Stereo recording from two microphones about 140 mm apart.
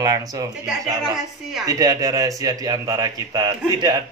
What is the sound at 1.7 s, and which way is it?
Speech, 25° right (ahead or behind).